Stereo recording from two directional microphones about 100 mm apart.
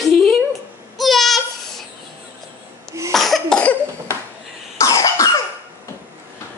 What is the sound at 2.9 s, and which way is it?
Cough, 30° right (ahead or behind).